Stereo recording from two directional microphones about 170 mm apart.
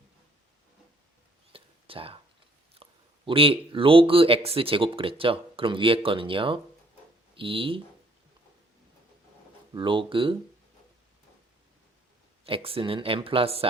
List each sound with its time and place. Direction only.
1.5 s whispering: 35° right (ahead or behind)
2.8 s a sound: 35° right (ahead or behind)
3.2 s speech: 30° right (ahead or behind)
9.7 s speech: 30° right (ahead or behind)
12.5 s speech: 35° right (ahead or behind)